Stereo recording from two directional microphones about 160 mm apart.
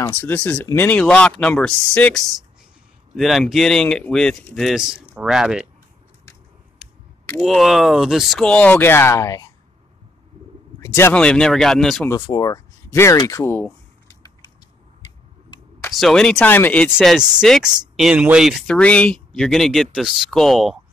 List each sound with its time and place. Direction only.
0.0 s speech: 15° left (ahead or behind); by 5.7 s 5° right (ahead or behind)
6.8 s a sound: 5° right (ahead or behind)
7.3 s speech: centre (ahead or behind); by 9.5 s 20° left (ahead or behind)
10.8 s speech: 15° left (ahead or behind)
12.3 s speech: 25° left (ahead or behind)
13.2 s a sound: 20° left (ahead or behind)
15.9 s speech: centre (ahead or behind)
18.8 s speech: 10° left (ahead or behind)